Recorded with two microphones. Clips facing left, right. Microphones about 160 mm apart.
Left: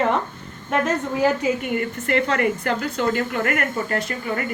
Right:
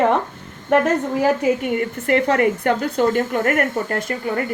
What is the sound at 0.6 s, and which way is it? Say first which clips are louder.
Speech: right 6 dB; 65° right (ahead or behind).